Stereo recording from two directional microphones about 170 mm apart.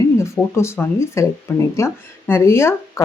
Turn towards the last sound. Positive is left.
turn(degrees=15)  # may be behind; listen again after turning